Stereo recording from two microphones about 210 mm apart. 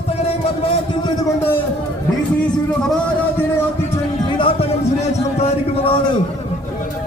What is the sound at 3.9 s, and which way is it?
Music, 25° left (ahead or behind).